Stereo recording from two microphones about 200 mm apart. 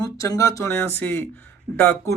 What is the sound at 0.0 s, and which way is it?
Speech, 15° left (ahead or behind).